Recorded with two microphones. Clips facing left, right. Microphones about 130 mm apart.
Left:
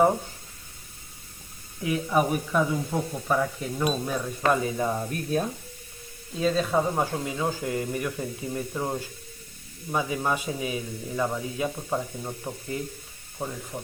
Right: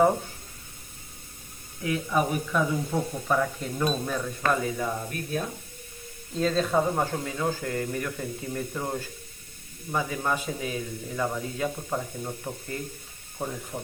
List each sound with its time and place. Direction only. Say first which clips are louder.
1.8 s a man's voice: left 2 dB; 15° left (ahead or behind)
6.3 s a man's voice: even; 5° left (ahead or behind)